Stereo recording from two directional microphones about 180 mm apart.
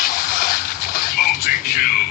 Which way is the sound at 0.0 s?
50° left (ahead or behind).